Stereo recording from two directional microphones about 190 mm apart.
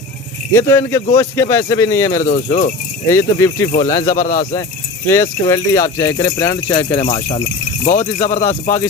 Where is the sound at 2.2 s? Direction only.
40° left (ahead or behind).